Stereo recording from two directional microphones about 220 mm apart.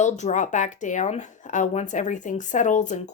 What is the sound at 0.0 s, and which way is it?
Speech, 35° left (ahead or behind).